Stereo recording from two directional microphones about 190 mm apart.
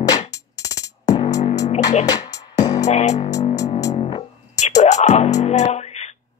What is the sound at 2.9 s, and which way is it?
Music, 35° left (ahead or behind).